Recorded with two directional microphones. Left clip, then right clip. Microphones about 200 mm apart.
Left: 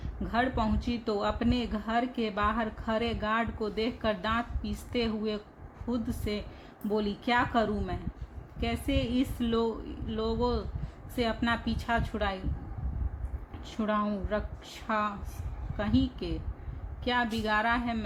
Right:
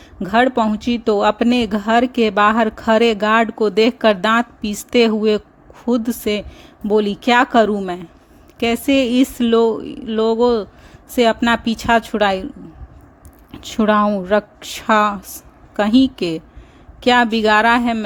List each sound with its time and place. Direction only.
0.2 s a woman's voice: 50° right (ahead or behind)
13.6 s a woman's voice: 60° right (ahead or behind)